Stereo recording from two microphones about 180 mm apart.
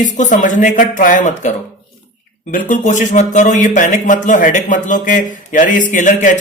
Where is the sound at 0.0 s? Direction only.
45° left (ahead or behind).